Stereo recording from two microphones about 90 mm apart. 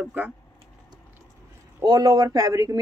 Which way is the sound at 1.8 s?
50° right (ahead or behind).